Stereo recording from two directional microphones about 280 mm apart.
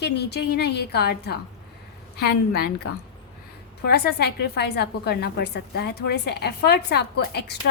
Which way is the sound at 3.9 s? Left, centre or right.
Left.